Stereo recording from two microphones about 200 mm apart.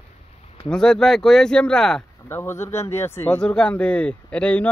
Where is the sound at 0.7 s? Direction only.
5° left (ahead or behind).